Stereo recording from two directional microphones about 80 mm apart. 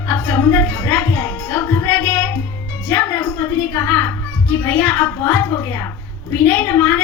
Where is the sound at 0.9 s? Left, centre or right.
Left.